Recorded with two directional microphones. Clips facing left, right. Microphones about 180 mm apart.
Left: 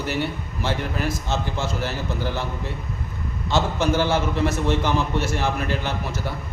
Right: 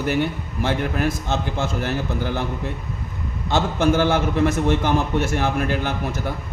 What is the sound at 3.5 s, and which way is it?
A man's voice, 55° right (ahead or behind).